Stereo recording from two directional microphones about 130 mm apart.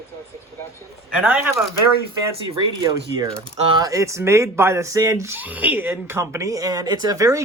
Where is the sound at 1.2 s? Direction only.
10° right (ahead or behind).